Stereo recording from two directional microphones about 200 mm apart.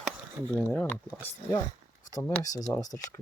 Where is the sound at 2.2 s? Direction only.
10° left (ahead or behind).